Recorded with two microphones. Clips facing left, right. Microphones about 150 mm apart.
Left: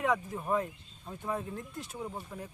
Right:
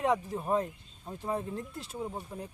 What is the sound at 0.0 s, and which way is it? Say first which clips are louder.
Speech: right 2 dB; 35° right (ahead or behind).